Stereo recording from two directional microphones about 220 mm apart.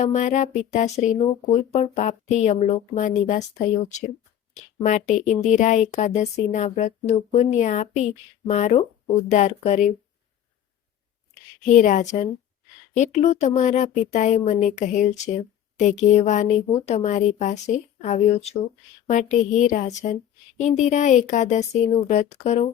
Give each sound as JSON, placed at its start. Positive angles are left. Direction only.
{"t": 0.0, "sound": "speech", "side_deg": 30}
{"t": 4.5, "sound": "speech", "side_deg": 35}
{"t": 11.6, "sound": "speech", "side_deg": 35}